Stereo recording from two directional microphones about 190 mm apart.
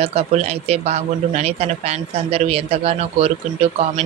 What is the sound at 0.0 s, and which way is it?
Speech, 35° right (ahead or behind).